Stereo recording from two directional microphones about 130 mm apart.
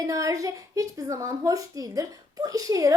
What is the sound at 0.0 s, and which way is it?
Speech, 25° right (ahead or behind).